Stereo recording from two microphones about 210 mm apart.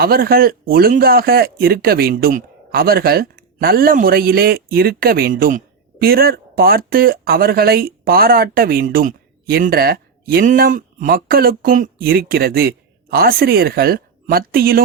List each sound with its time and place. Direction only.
0.0 s speech: 45° right (ahead or behind)